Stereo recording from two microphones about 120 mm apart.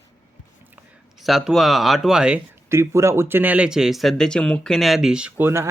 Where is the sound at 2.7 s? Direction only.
25° right (ahead or behind).